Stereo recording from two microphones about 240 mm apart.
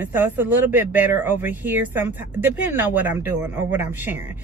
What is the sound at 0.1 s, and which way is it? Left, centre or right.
Speech, centre.